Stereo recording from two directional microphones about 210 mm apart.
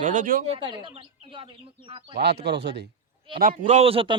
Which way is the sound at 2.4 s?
55° right (ahead or behind).